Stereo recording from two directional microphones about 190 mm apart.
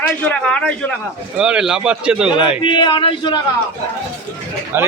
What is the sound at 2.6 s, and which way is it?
Speech, 25° left (ahead or behind).